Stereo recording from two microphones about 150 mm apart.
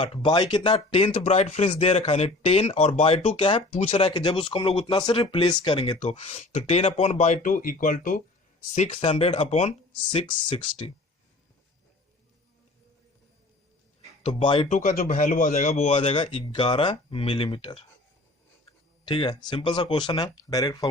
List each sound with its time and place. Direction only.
0.0 s speech: 30° left (ahead or behind)
4.1 s speech: 30° left (ahead or behind)
6.0 s speech: 45° left (ahead or behind); by 8.2 s 65° left (ahead or behind)
8.7 s speech: 45° left (ahead or behind)
10.1 s speech: 30° left (ahead or behind)
14.2 s a sound: 45° left (ahead or behind)
14.4 s speech: 40° left (ahead or behind)
14.7 s speech: 60° left (ahead or behind); by 17.8 s 35° left (ahead or behind)
19.0 s speech: 30° left (ahead or behind)